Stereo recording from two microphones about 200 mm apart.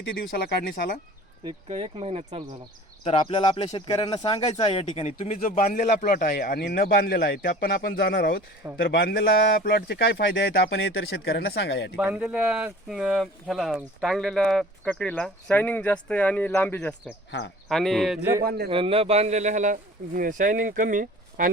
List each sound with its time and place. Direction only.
0.0 s speech: 50° left (ahead or behind)
1.5 s speech: 30° right (ahead or behind)
3.0 s speech: 30° left (ahead or behind); by 11.9 s 55° left (ahead or behind)
11.9 s speech: 5° right (ahead or behind)
18.4 s a man's voice: 55° right (ahead or behind)
18.7 s speech: 25° right (ahead or behind); by 21.5 s 45° right (ahead or behind)